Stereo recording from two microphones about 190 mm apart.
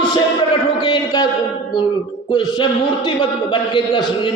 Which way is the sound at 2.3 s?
25° left (ahead or behind).